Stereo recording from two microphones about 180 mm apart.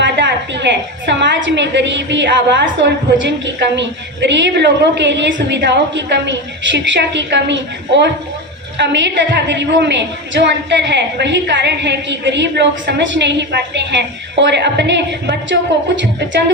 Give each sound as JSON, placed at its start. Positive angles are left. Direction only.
{"t": 0.0, "sound": "a woman's voice", "side_deg": -75}